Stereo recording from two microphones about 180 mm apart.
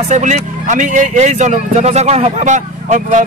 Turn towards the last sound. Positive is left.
turn(degrees=-40)  # may be behind; listen again after turning